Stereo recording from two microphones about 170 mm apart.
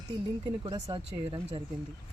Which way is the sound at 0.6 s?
20° right (ahead or behind).